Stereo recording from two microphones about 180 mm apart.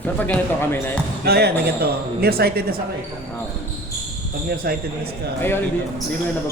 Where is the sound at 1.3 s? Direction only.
60° right (ahead or behind).